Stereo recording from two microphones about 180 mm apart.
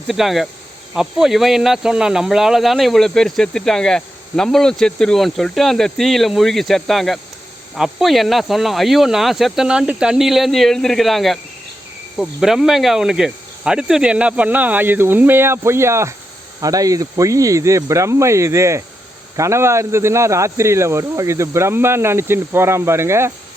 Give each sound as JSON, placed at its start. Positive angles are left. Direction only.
{"t": 0.1, "sound": "speech", "side_deg": 0}